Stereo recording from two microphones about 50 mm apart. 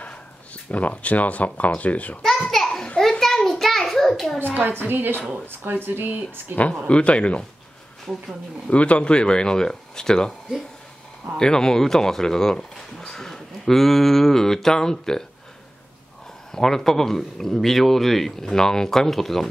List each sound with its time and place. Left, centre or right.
0.0 s speech: left
2.2 s a sound: centre
4.8 s speech: right
6.9 s speech: left
8.6 s speech: left
11.3 s speech: centre
16.5 s speech: centre